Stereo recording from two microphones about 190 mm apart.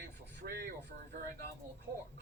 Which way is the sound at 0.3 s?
50° right (ahead or behind).